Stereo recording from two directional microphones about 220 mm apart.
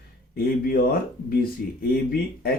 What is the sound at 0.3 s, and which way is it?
Speech, 45° left (ahead or behind).